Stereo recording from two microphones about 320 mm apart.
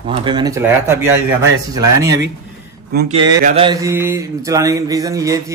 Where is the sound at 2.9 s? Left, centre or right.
Right.